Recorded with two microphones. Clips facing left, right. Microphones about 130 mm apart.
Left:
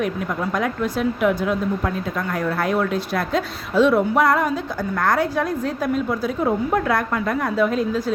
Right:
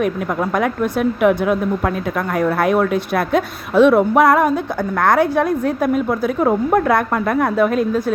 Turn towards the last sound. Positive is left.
turn(degrees=-55)  # may be behind; listen again after turning